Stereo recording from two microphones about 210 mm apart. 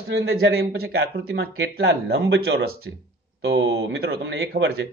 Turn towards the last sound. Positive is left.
turn(degrees=-45)  # may be behind; listen again after turning